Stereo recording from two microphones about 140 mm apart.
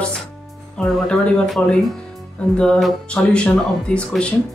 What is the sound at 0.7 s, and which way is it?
Speech, 5° left (ahead or behind).